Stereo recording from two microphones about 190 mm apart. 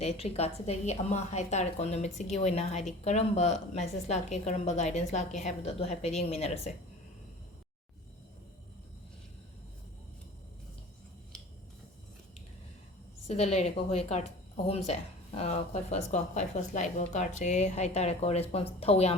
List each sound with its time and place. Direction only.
0.0 s a woman's voice: 35° left (ahead or behind)
11.3 s finger snapping: 5° left (ahead or behind)
13.2 s a woman's voice: 35° left (ahead or behind)